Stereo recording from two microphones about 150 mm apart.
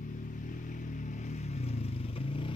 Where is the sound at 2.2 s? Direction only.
40° left (ahead or behind).